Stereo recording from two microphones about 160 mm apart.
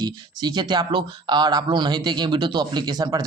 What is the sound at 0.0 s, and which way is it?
Speech, 25° right (ahead or behind).